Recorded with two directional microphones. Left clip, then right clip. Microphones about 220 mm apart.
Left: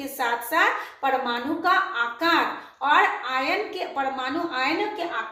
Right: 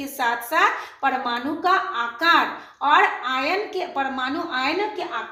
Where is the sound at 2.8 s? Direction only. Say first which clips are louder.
Right 2 dB; 45° right (ahead or behind).